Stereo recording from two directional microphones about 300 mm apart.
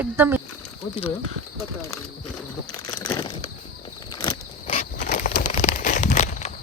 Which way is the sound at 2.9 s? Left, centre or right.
Centre.